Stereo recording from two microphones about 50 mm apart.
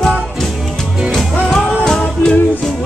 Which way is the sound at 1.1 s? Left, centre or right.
Centre.